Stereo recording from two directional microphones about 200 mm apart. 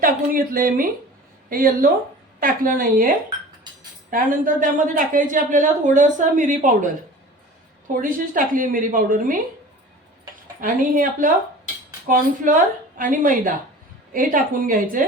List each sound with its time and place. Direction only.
0.0 s a sound: 45° right (ahead or behind)
1.5 s a woman's voice: 45° right (ahead or behind)
4.1 s a woman's voice: 40° right (ahead or behind)
8.0 s a woman's voice: 45° right (ahead or behind)
10.6 s a woman's voice: 40° right (ahead or behind)